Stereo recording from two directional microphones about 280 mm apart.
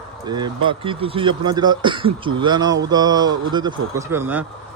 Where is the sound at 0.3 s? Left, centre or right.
Centre.